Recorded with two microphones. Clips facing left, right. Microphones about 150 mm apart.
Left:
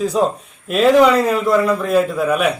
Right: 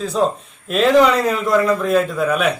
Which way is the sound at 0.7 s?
5° left (ahead or behind).